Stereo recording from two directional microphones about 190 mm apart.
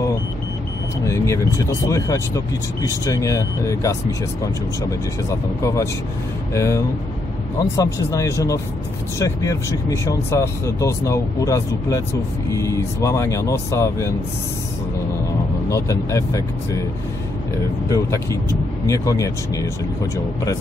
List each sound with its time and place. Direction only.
1.0 s speech: 15° left (ahead or behind)
6.5 s speech: 15° left (ahead or behind)
15.7 s speech: 15° left (ahead or behind)
17.8 s speech: 15° left (ahead or behind)